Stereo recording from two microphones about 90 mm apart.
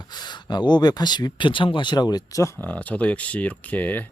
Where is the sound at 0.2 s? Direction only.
55° left (ahead or behind).